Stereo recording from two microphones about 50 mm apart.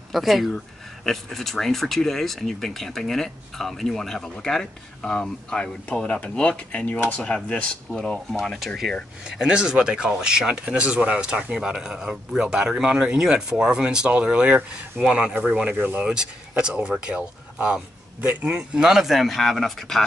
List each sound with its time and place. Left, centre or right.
0.1 s speech: centre; by 8.0 s left
8.3 s speech: centre
9.2 s speech: centre